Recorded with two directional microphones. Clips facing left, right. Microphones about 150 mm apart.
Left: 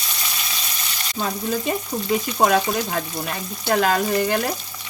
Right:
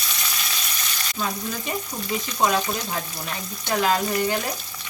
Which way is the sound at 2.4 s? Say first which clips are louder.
Left 3 dB; 60° left (ahead or behind).